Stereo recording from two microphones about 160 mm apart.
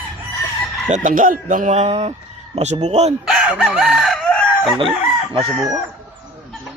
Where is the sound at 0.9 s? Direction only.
55° right (ahead or behind).